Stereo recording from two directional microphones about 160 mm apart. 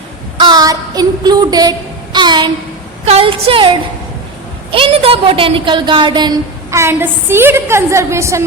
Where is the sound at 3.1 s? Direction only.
40° right (ahead or behind).